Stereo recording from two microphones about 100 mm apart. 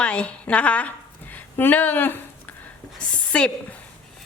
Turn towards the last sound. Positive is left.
turn(degrees=10)  # may be behind; listen again after turning